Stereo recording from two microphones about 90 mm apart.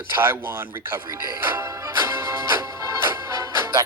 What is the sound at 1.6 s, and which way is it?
Music, 35° right (ahead or behind).